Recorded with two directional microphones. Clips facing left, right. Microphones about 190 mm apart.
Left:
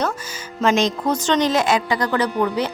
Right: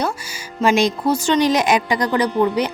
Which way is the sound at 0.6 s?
10° right (ahead or behind).